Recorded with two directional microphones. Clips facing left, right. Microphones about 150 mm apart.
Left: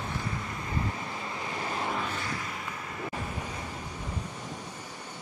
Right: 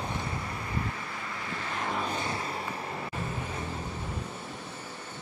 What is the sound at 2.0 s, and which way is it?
Vehicle, 20° right (ahead or behind).